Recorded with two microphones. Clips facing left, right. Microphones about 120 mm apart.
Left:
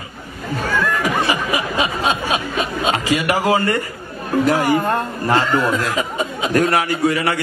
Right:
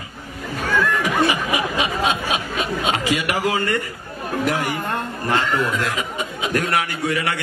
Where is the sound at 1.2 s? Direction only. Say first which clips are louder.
Left 1 dB; 35° left (ahead or behind).